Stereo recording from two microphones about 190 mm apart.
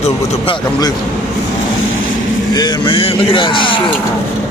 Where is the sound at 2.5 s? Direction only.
20° left (ahead or behind).